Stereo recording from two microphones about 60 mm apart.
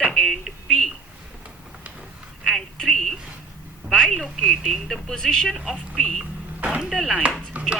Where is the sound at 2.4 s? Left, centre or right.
Centre.